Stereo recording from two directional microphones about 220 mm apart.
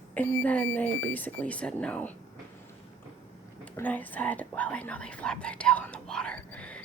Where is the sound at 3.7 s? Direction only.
5° left (ahead or behind).